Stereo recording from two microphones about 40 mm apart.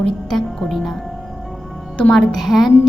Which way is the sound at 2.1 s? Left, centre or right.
Centre.